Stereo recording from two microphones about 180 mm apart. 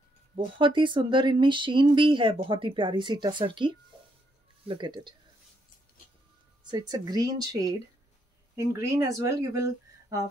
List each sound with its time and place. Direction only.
0.6 s speech: 25° right (ahead or behind)
6.6 s speech: 20° right (ahead or behind)